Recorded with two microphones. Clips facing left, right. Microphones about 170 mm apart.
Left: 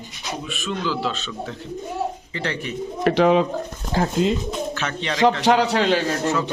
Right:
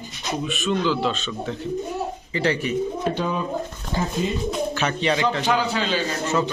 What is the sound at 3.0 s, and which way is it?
Speech, 85° left.